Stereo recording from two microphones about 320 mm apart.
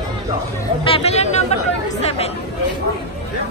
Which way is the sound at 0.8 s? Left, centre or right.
Centre.